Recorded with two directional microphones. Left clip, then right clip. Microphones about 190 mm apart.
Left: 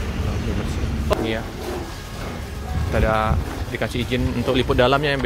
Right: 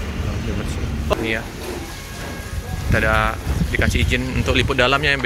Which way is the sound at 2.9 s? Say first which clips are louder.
Right 2 dB; 10° left (ahead or behind).